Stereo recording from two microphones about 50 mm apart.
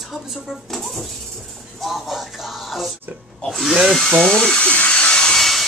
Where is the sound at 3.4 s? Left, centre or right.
Centre.